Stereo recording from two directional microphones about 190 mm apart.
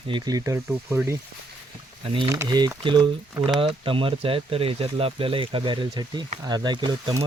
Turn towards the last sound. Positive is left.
turn(degrees=-25)  # may be behind; listen again after turning